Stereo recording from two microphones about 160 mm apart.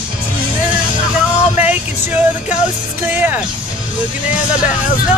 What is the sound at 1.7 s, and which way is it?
Speech, 10° right (ahead or behind).